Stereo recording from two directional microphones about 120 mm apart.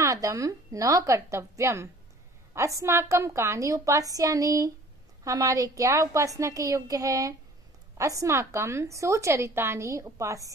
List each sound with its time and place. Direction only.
0.0 s a woman's voice: 30° right (ahead or behind)